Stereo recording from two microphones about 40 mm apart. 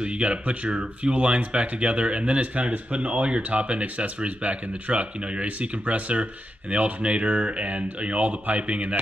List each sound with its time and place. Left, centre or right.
0.0 s speech: right